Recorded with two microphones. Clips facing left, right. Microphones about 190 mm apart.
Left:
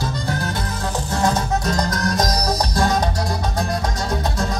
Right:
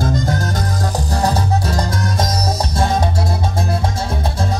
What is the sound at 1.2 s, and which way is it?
Music, 30° right (ahead or behind).